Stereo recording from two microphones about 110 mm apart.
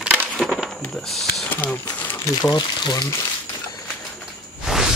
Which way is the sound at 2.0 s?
15° left (ahead or behind).